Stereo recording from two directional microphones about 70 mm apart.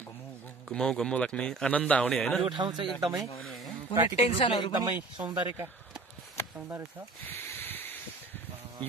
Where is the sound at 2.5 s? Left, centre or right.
Right.